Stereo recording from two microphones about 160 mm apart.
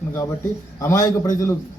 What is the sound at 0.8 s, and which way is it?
Speech, 20° left (ahead or behind).